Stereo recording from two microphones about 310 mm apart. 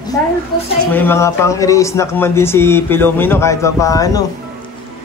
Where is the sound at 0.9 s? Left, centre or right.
Centre.